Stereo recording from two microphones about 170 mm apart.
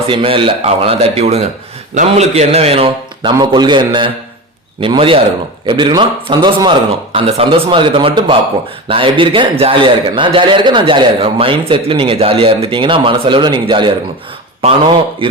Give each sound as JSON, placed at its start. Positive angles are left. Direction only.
{"t": 0.1, "sound": "a man's voice", "side_deg": -30}